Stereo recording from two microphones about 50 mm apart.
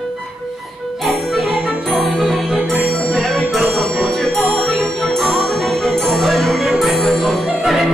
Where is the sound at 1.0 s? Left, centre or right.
Centre.